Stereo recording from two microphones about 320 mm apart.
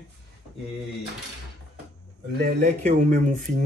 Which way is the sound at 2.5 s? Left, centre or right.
Right.